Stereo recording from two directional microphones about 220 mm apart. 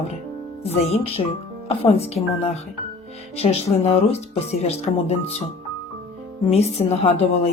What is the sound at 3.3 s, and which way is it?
A woman's voice, 30° left (ahead or behind).